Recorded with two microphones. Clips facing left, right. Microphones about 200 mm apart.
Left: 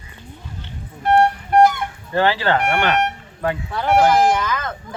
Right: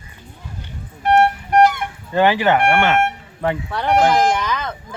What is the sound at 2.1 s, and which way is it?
Speech, 15° right (ahead or behind).